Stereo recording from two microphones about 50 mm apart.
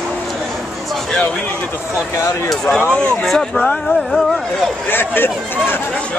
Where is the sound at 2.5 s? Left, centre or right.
Centre.